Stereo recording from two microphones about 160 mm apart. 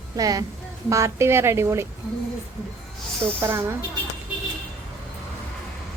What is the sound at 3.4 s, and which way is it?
Speech, 15° right (ahead or behind).